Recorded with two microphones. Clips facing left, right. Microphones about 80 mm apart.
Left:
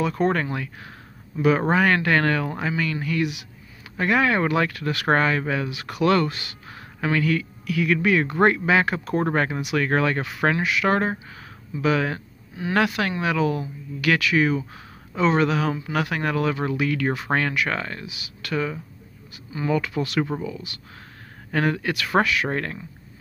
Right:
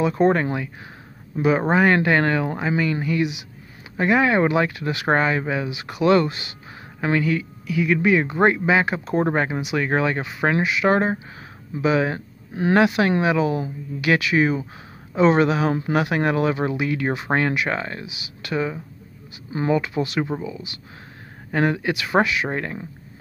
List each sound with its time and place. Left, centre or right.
0.0 s speech: right
18.0 s speech: left
18.4 s speech: centre
19.5 s speech: right
19.8 s speech: centre